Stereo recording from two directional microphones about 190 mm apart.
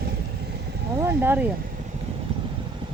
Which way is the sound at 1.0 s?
10° right (ahead or behind).